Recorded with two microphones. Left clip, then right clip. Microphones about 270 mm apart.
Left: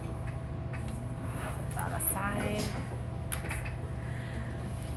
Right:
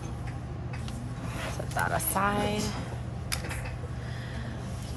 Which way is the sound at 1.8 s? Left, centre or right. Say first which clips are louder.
Right 9 dB; centre.